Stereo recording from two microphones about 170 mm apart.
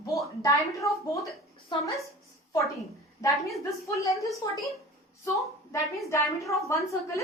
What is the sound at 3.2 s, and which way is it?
A woman's voice, 20° left (ahead or behind).